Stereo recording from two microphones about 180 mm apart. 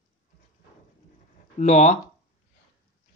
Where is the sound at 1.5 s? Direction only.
40° left (ahead or behind).